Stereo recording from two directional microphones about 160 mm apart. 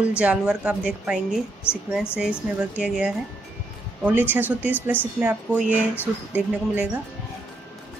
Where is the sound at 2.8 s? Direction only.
5° right (ahead or behind).